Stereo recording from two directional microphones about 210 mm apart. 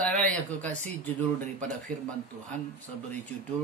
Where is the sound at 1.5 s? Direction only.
35° right (ahead or behind).